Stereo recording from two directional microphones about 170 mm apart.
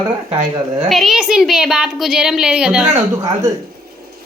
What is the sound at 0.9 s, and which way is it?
A woman's voice, centre (ahead or behind).